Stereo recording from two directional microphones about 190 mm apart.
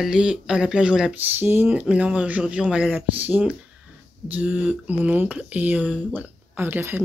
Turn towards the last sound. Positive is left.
turn(degrees=-10)  # may be behind; listen again after turning